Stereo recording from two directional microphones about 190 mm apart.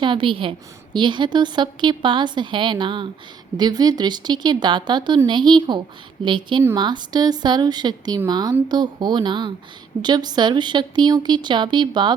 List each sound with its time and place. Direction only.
0.0 s a woman's voice: 25° right (ahead or behind)